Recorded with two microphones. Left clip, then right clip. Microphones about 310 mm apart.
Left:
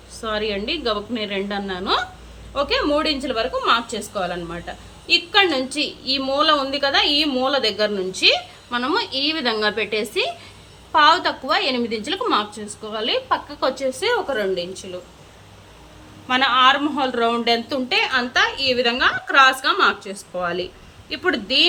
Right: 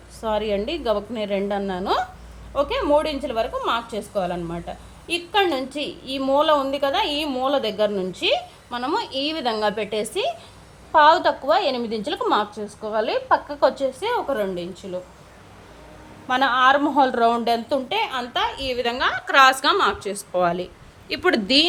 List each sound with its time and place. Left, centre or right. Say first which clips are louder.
0.2 s a woman's voice: right 1 dB; right
16.2 s a woman's voice: left 2 dB; right